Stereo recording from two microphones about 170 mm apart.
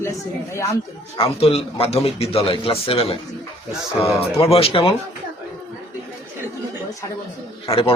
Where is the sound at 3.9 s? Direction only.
15° left (ahead or behind).